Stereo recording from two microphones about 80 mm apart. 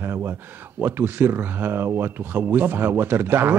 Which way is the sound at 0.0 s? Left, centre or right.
Right.